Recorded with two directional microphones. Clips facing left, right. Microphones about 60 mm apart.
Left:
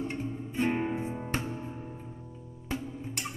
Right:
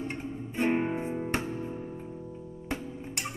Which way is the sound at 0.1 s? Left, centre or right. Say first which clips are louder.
Left 1 dB; right.